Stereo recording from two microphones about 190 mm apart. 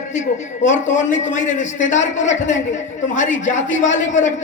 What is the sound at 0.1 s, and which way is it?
A man's voice, 40° left (ahead or behind).